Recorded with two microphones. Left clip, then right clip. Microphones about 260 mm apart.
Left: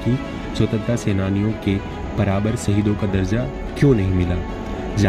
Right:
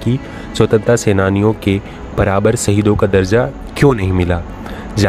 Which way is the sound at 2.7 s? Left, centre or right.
Right.